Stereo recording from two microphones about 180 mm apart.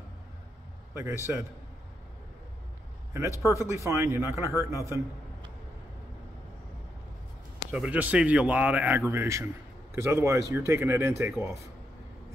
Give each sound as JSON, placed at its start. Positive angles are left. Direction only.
{"t": 0.9, "sound": "speech", "side_deg": -15}
{"t": 3.1, "sound": "a man's voice", "side_deg": -15}
{"t": 7.7, "sound": "speech", "side_deg": -5}